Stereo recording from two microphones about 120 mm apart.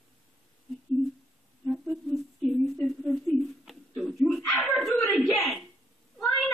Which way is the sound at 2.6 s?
Centre (ahead or behind).